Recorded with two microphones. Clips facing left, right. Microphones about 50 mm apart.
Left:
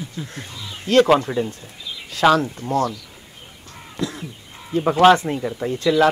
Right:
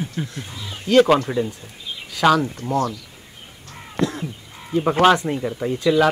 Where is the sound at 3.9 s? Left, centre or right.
Right.